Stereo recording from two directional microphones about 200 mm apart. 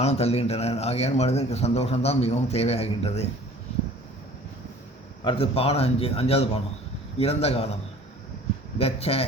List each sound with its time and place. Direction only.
0.0 s a man's voice: 30° left (ahead or behind)
5.2 s a man's voice: 25° left (ahead or behind)
8.8 s a man's voice: 30° left (ahead or behind)